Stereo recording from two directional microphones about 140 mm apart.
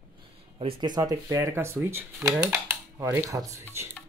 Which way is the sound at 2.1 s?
Centre (ahead or behind).